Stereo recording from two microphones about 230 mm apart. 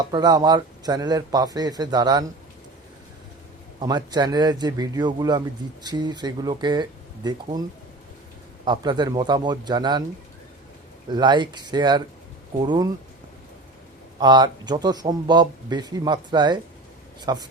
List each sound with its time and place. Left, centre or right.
0.1 s a man's voice: centre
3.8 s a man's voice: centre
8.6 s speech: centre
11.1 s speech: centre
14.2 s a man's voice: centre